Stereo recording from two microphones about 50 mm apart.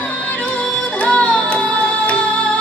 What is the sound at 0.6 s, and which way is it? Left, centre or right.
Music, left.